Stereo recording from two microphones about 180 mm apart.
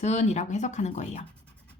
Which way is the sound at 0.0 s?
40° left (ahead or behind).